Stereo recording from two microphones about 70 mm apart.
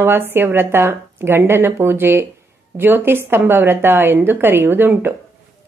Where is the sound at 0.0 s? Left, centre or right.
Right.